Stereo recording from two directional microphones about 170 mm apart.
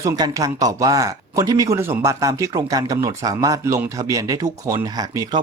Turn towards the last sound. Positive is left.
turn(degrees=-20)  # may be behind; listen again after turning